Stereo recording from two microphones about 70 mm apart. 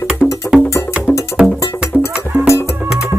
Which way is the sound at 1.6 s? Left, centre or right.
Left.